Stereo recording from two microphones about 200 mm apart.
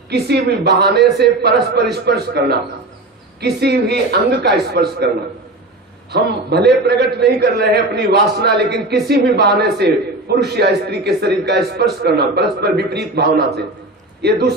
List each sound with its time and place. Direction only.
0.1 s a man's voice: 55° right (ahead or behind)
6.1 s a man's voice: 55° right (ahead or behind)